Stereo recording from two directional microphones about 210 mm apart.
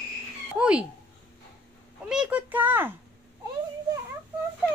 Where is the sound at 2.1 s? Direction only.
5° right (ahead or behind).